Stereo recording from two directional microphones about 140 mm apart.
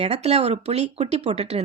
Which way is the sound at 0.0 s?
45° right (ahead or behind).